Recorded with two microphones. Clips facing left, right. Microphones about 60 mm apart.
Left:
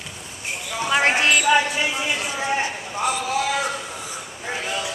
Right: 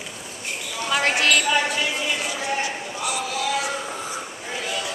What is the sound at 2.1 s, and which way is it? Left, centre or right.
Clip-clop, left.